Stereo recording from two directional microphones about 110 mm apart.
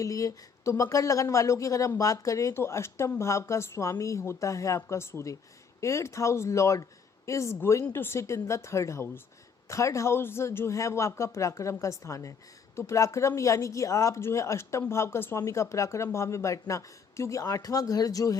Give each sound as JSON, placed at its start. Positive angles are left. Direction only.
{"t": 0.0, "sound": "speech", "side_deg": 30}